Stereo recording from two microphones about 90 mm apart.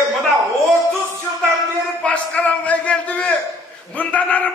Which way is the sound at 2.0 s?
15° left (ahead or behind).